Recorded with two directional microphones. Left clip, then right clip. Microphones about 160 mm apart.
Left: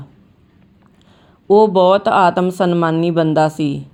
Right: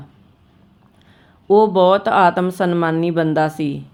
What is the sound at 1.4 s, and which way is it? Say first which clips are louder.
Speech: left 2 dB; 15° left (ahead or behind).